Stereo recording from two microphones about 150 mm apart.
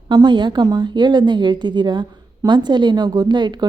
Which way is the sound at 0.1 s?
30° right (ahead or behind).